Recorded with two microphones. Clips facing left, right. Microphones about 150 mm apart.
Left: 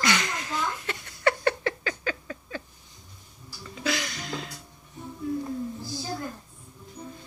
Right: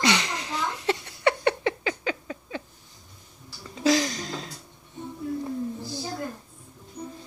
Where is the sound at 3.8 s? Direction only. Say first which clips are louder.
Right 8 dB; 35° right (ahead or behind).